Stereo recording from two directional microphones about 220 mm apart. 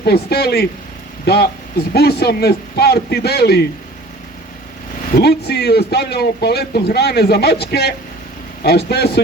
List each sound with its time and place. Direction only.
0.0 s a man's voice: 45° left (ahead or behind)
5.1 s a man's voice: 45° left (ahead or behind)